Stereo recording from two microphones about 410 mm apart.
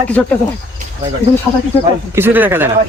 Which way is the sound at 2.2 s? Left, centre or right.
Centre.